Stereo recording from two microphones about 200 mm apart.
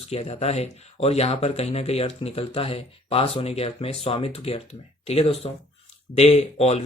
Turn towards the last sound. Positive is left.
turn(degrees=30)  # may be behind; listen again after turning